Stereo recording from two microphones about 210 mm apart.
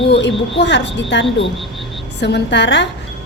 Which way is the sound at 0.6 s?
55° left (ahead or behind).